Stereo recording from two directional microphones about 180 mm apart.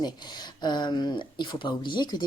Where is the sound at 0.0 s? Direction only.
25° left (ahead or behind).